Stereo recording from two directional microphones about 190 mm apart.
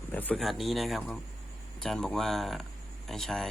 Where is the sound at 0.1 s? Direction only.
10° left (ahead or behind).